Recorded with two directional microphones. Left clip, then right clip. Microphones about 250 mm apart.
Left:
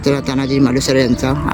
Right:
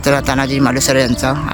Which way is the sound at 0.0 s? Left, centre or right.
Centre.